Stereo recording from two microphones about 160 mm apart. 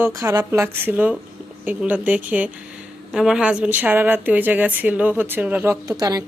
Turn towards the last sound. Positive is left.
turn(degrees=-25)  # may be behind; listen again after turning